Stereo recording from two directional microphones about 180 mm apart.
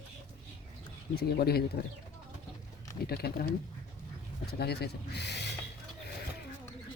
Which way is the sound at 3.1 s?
60° left (ahead or behind).